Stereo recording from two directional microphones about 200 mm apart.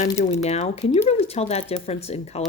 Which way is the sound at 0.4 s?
35° left (ahead or behind).